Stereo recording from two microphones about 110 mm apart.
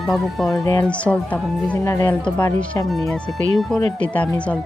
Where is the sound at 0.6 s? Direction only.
30° left (ahead or behind).